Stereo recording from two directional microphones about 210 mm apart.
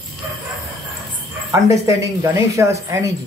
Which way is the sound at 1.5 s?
15° right (ahead or behind).